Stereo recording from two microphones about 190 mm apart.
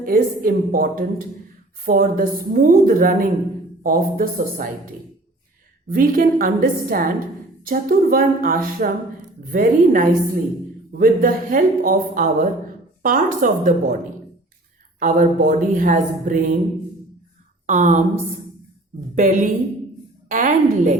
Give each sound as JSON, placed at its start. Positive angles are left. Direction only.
{"t": 0.0, "sound": "a woman's voice", "side_deg": -50}
{"t": 5.9, "sound": "a woman's voice", "side_deg": -45}
{"t": 14.9, "sound": "a woman's voice", "side_deg": -45}
{"t": 17.7, "sound": "speech", "side_deg": -40}
{"t": 19.1, "sound": "a woman's voice", "side_deg": -45}